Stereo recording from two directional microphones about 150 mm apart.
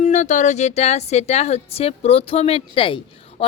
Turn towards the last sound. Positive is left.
turn(degrees=35)  # may be behind; listen again after turning